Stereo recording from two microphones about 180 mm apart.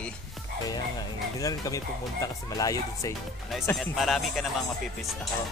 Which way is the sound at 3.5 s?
Centre (ahead or behind).